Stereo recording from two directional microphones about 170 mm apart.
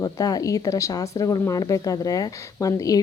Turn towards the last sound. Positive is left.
turn(degrees=20)  # may be behind; listen again after turning